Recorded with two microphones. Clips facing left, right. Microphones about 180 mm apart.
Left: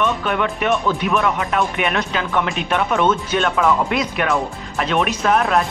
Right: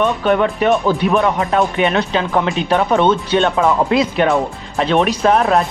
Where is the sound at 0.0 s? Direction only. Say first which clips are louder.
Right 5 dB; 35° right (ahead or behind).